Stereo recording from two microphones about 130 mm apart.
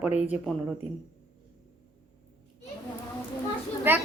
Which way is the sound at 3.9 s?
15° right (ahead or behind).